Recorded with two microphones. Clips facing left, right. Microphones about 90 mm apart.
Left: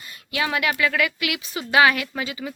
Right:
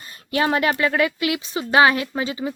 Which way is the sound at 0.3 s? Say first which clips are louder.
Right 4 dB; 35° right (ahead or behind).